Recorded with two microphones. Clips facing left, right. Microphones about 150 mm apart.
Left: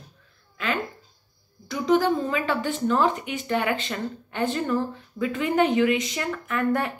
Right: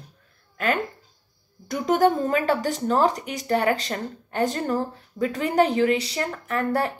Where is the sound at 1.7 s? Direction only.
50° right (ahead or behind).